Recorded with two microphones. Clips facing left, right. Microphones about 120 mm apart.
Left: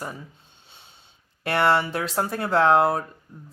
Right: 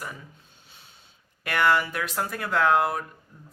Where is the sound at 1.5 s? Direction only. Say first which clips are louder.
Left 2 dB; 30° left (ahead or behind).